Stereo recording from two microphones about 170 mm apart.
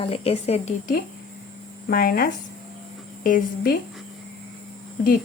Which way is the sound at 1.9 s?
60° left (ahead or behind).